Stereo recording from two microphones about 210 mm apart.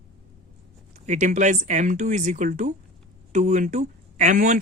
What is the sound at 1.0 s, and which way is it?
Speech, 35° right (ahead or behind).